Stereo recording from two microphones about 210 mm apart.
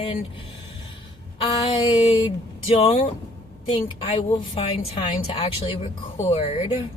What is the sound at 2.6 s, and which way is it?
Speech, 30° left (ahead or behind).